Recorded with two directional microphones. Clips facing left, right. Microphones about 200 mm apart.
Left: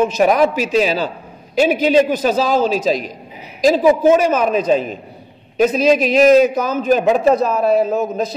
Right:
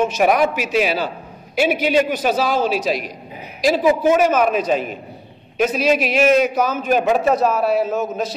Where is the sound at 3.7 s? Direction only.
35° left (ahead or behind).